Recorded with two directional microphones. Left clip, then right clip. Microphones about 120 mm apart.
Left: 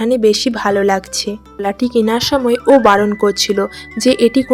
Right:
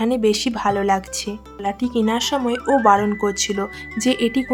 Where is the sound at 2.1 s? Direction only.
35° left (ahead or behind).